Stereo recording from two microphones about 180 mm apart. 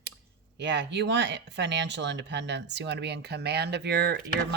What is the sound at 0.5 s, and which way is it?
Speech, 75° right (ahead or behind).